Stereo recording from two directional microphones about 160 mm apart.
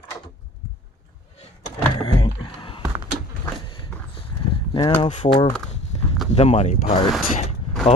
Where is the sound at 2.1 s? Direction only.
30° left (ahead or behind).